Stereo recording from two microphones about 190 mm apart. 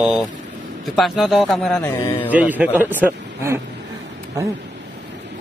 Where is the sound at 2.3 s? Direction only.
10° right (ahead or behind).